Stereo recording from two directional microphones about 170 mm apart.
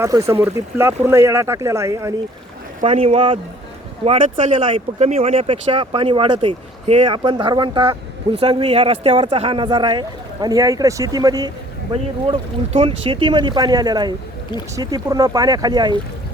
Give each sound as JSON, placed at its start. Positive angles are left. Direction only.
{"t": 0.0, "sound": "speech", "side_deg": -15}
{"t": 2.8, "sound": "speech", "side_deg": -35}
{"t": 4.2, "sound": "speech", "side_deg": -50}
{"t": 4.6, "sound": "speech", "side_deg": -35}